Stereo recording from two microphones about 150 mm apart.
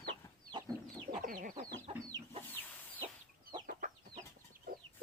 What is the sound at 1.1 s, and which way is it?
Chicken, 65° right (ahead or behind).